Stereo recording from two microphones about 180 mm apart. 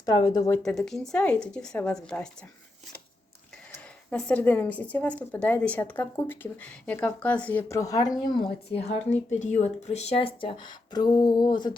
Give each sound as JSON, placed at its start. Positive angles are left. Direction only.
{"t": 0.0, "sound": "speech", "side_deg": 20}
{"t": 0.6, "sound": "speech", "side_deg": 5}
{"t": 3.7, "sound": "speech", "side_deg": 10}
{"t": 9.4, "sound": "speech", "side_deg": 40}